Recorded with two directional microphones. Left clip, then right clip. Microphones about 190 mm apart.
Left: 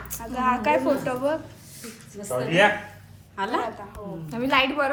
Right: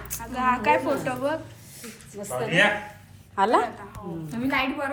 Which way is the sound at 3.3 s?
10° right (ahead or behind).